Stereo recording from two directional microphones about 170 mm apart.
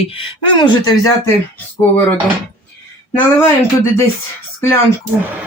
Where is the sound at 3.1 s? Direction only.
15° left (ahead or behind).